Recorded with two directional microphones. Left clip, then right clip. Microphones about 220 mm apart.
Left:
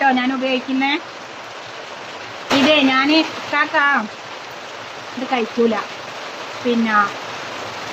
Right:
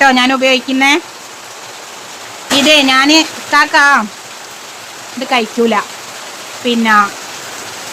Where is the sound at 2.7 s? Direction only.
60° right (ahead or behind).